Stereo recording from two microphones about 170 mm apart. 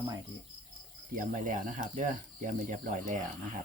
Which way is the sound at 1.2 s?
50° right (ahead or behind).